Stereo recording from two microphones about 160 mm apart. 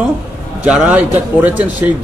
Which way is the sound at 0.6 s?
5° right (ahead or behind).